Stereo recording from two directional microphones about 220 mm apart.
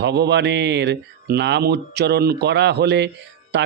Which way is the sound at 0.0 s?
50° right (ahead or behind).